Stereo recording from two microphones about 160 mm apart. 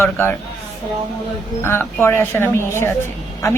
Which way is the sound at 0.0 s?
15° left (ahead or behind).